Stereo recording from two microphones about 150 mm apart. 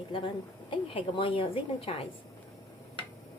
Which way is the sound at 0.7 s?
35° left (ahead or behind).